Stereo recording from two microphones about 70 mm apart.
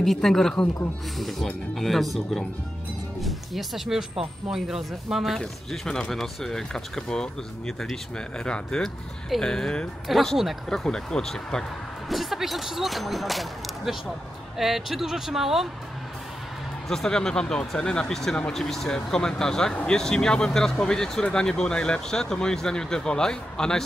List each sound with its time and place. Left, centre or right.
0.0 s speech: centre
3.2 s speech: centre
5.4 s speech: centre
10.0 s speech: centre
12.1 s speech: centre
16.9 s speech: centre